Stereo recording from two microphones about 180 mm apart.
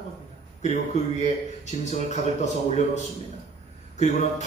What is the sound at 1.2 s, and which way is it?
Speech, 40° left (ahead or behind).